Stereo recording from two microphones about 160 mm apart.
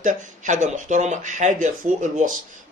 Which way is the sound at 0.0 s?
50° right (ahead or behind).